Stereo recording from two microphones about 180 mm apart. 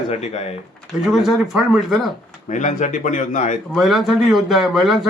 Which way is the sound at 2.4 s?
45° left (ahead or behind).